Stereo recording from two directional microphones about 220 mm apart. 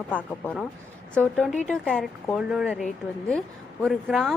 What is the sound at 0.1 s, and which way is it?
Speech, 5° left (ahead or behind).